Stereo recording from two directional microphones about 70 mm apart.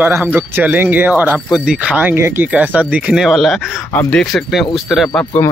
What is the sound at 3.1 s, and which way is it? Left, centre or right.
Speech, centre.